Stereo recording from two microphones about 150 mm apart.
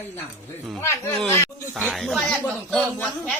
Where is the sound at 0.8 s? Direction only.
15° left (ahead or behind).